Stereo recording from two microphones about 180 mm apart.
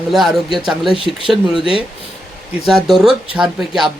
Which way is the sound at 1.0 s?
30° right (ahead or behind).